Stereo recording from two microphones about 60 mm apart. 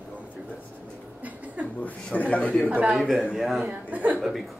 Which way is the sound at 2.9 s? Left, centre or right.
Centre.